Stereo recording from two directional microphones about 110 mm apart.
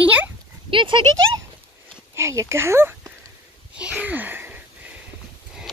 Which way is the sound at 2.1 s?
25° right (ahead or behind).